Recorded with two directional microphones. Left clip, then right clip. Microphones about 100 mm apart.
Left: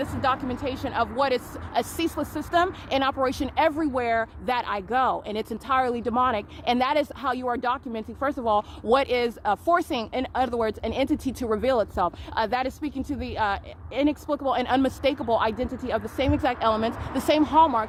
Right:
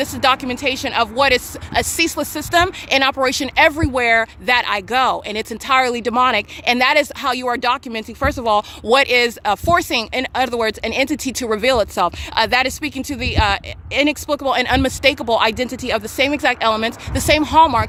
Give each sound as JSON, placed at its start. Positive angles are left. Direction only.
{"t": 0.0, "sound": "speech", "side_deg": -50}
{"t": 1.7, "sound": "speech", "side_deg": -40}
{"t": 4.4, "sound": "speech", "side_deg": -25}
{"t": 5.6, "sound": "speech", "side_deg": -35}